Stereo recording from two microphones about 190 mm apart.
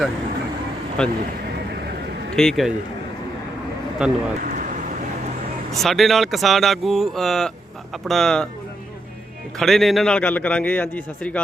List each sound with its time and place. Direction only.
1.0 s speech: 5° left (ahead or behind)
2.3 s speech: centre (ahead or behind)
4.0 s speech: 5° right (ahead or behind)
4.4 s vehicle: 45° right (ahead or behind)
5.7 s speech: centre (ahead or behind)
9.6 s a man's voice: centre (ahead or behind)